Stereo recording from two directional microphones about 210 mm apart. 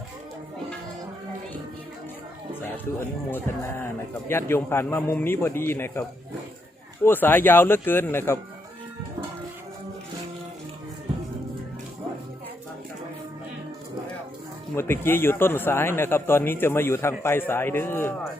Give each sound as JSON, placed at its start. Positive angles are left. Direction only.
{"t": 3.2, "sound": "speech", "side_deg": 10}
{"t": 14.8, "sound": "speech", "side_deg": 10}